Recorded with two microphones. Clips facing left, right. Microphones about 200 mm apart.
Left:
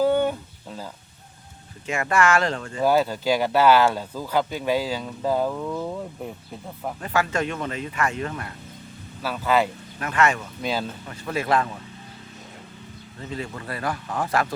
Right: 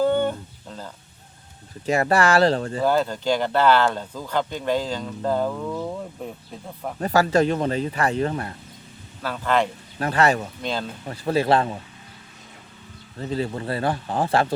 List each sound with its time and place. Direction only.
0.0 s a sound: 10° left (ahead or behind)
1.9 s speech: 35° right (ahead or behind)
2.8 s speech: 10° left (ahead or behind)
7.0 s speech: 35° right (ahead or behind)
9.2 s speech: 5° left (ahead or behind)
10.0 s speech: 35° right (ahead or behind)
10.6 s speech: 5° left (ahead or behind)
11.0 s speech: 35° right (ahead or behind)
13.3 s speech: 30° right (ahead or behind)